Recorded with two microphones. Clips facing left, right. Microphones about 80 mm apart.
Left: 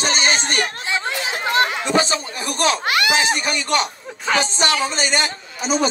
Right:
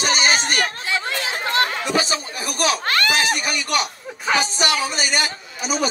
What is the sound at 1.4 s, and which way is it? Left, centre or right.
Chatter, left.